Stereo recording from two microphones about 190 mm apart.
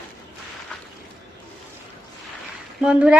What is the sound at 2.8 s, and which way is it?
Speech, 5° right (ahead or behind).